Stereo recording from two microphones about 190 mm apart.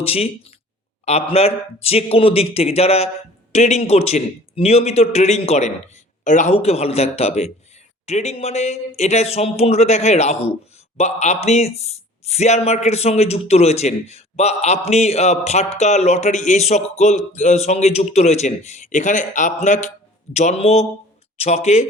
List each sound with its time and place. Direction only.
0.0 s speech: 30° left (ahead or behind)